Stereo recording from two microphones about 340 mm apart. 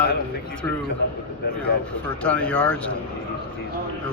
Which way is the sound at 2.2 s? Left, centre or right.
Centre.